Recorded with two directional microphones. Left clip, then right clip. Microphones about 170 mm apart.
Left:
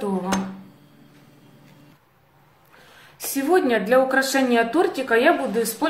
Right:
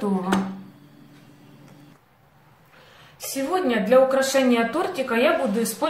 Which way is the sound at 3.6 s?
50° left (ahead or behind).